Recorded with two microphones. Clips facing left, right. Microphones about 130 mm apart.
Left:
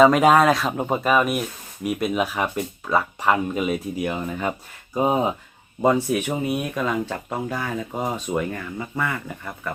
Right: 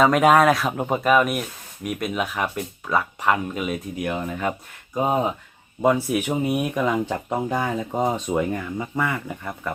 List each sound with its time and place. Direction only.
0.0 s speech: centre (ahead or behind)
6.2 s speech: 20° right (ahead or behind)